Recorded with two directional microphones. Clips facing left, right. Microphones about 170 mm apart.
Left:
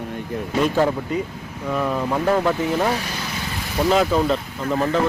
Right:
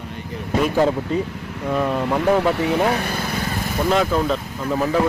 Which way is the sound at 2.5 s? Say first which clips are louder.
Right 2 dB; 70° right (ahead or behind).